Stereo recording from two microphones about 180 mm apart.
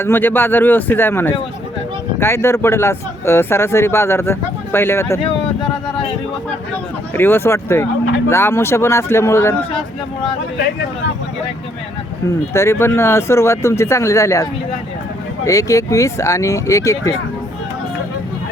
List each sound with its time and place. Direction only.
0.0 s speech: 10° left (ahead or behind)
7.1 s speech: 10° left (ahead or behind)
12.5 s speech: 15° left (ahead or behind)
15.4 s speech: 20° left (ahead or behind)